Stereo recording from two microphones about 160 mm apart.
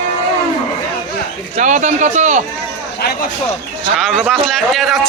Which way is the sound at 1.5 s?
50° right (ahead or behind).